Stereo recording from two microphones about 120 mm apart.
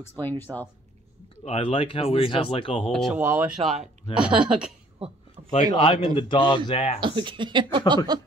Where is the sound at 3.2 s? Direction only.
20° right (ahead or behind).